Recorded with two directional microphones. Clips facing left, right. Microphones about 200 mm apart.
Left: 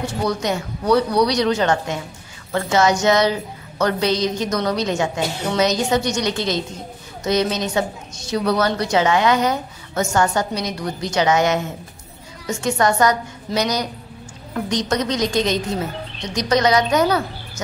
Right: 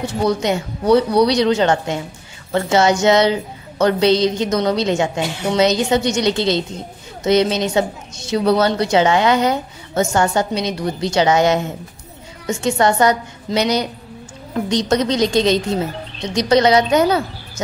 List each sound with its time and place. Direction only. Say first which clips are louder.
0.0 s a woman's voice: right 4 dB; 25° right (ahead or behind)